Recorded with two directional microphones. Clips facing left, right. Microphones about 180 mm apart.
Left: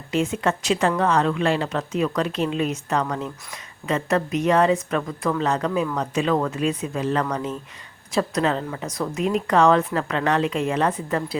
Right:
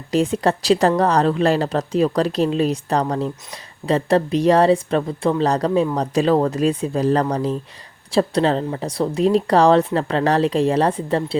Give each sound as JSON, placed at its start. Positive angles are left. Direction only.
{"t": 0.1, "sound": "speech", "side_deg": -35}